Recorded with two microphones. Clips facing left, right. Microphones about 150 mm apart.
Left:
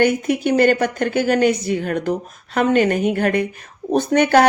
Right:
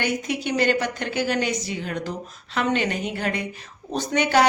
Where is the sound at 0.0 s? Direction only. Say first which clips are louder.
Left 9 dB; 50° left (ahead or behind).